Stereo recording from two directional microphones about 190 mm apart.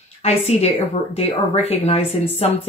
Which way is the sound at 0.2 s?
35° left (ahead or behind).